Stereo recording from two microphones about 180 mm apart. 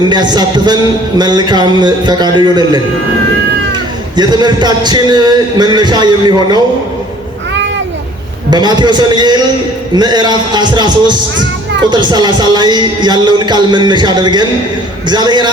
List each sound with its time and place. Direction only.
0.1 s a man's voice: 25° right (ahead or behind)
4.2 s a man's voice: 25° right (ahead or behind)
8.4 s a man's voice: 25° right (ahead or behind)